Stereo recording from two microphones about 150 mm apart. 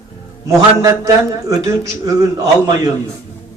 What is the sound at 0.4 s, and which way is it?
A man's voice, 20° right (ahead or behind).